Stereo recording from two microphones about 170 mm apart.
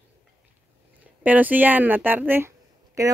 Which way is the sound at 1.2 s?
10° right (ahead or behind).